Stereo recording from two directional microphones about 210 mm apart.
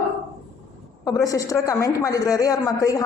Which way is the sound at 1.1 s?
15° left (ahead or behind).